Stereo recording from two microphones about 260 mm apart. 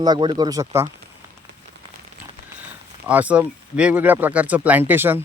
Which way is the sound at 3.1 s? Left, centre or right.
Centre.